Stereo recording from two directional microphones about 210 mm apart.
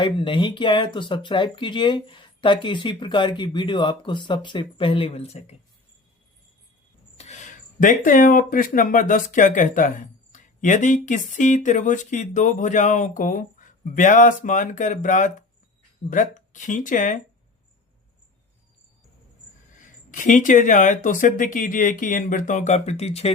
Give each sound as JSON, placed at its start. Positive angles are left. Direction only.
{"t": 0.0, "sound": "speech", "side_deg": 25}
{"t": 7.2, "sound": "speech", "side_deg": 35}
{"t": 20.1, "sound": "speech", "side_deg": 35}